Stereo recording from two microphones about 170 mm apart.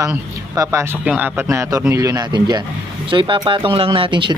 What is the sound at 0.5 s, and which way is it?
A man's voice, 15° right (ahead or behind).